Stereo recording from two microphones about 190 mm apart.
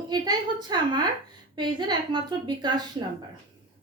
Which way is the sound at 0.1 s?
20° right (ahead or behind).